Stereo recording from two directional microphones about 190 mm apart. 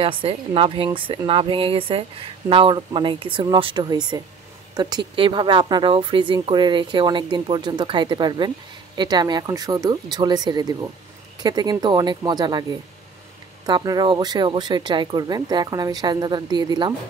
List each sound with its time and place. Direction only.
0.0 s speech: 30° right (ahead or behind)
13.7 s speech: 20° right (ahead or behind)